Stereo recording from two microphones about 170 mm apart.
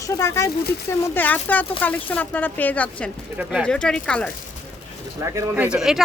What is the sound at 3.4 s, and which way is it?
Speech, 10° right (ahead or behind).